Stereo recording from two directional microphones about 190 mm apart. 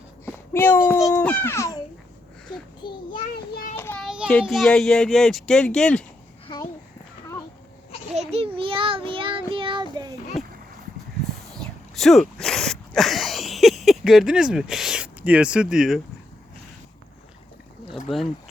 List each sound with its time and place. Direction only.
0.3 s a sound: 10° left (ahead or behind)
0.9 s speech: centre (ahead or behind)
1.2 s a child's voice: 10° left (ahead or behind)
2.8 s child singing: 25° left (ahead or behind)
3.3 s child singing: 50° left (ahead or behind)
3.8 s child singing: 10° left (ahead or behind)
4.0 s a sound: 5° right (ahead or behind)
4.3 s speech: 5° left (ahead or behind)
8.1 s child singing: 35° right (ahead or behind)
10.4 s boat: centre (ahead or behind)
11.5 s a sound: centre (ahead or behind)
17.9 s speech: centre (ahead or behind)